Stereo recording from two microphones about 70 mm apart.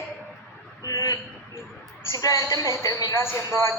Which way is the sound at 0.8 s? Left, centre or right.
Left.